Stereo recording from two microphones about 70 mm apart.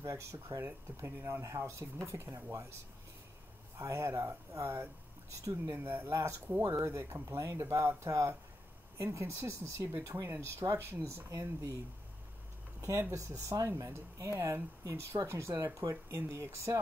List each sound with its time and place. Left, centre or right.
0.0 s speech: right
2.0 s speech: right
3.8 s speech: right
5.8 s speech: right
6.1 s speech: right
11.2 s speech: right
13.1 s speech: right